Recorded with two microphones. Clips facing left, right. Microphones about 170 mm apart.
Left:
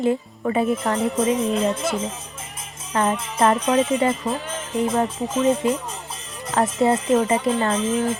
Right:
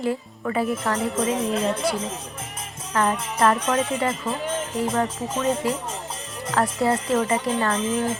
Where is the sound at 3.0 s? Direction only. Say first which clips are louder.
Left 1 dB; 20° left (ahead or behind).